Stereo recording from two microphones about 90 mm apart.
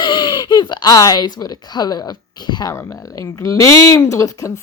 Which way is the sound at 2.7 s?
30° left (ahead or behind).